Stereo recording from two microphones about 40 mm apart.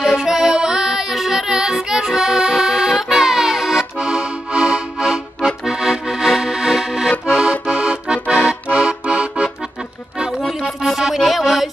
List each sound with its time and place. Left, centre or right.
0.0 s music: centre
3.0 s accordion: centre
6.4 s music: centre
7.2 s accordion: right
10.9 s music: centre